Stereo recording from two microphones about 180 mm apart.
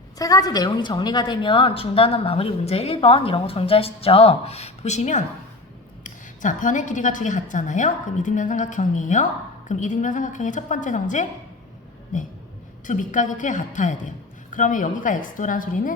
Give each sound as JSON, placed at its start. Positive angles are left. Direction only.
{"t": 0.2, "sound": "a woman's voice", "side_deg": 20}